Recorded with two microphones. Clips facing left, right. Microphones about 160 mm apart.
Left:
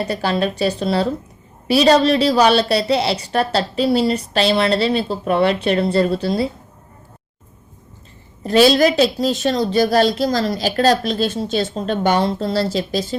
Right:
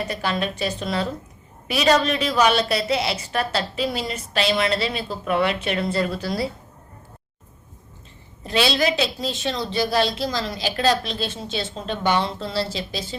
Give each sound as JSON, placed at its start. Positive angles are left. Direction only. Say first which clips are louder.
{"t": 0.0, "sound": "a woman's voice", "louder": "left 6 dB", "side_deg": 35}
{"t": 8.4, "sound": "a woman's voice", "louder": "left 8 dB", "side_deg": 45}